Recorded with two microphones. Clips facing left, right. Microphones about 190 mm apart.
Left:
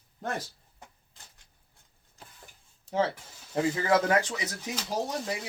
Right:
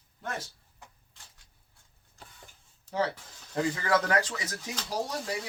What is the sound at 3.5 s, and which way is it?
Speech, 20° left (ahead or behind).